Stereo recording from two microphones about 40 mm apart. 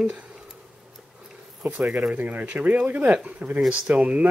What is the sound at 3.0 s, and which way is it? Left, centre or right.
Speech, right.